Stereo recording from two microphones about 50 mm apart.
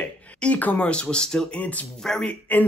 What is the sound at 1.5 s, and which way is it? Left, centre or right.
Speech, left.